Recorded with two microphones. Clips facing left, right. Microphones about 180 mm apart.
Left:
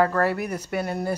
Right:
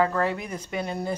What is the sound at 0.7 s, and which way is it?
Speech, 20° right (ahead or behind).